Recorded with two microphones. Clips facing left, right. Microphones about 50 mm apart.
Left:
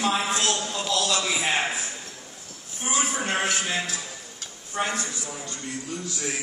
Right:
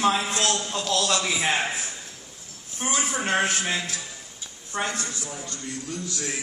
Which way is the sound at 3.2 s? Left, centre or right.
Right.